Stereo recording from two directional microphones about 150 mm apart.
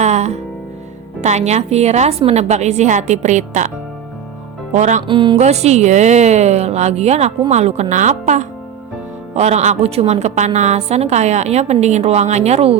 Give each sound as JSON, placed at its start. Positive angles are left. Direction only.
{"t": 0.0, "sound": "music", "side_deg": -50}
{"t": 1.2, "sound": "a woman's voice", "side_deg": -50}
{"t": 4.7, "sound": "a woman's voice", "side_deg": -50}
{"t": 5.0, "sound": "speech", "side_deg": -30}
{"t": 5.4, "sound": "a woman's voice", "side_deg": -45}